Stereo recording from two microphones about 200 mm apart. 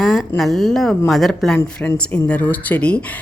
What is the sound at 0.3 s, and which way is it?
Speech, centre (ahead or behind).